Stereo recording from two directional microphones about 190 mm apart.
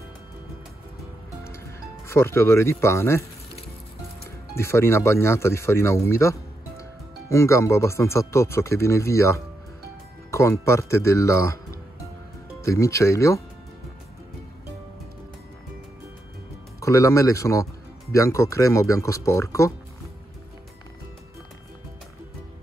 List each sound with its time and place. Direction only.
2.0 s speech: 15° left (ahead or behind)
4.6 s speech: 15° left (ahead or behind)
12.6 s speech: 15° left (ahead or behind)
16.8 s speech: 15° left (ahead or behind)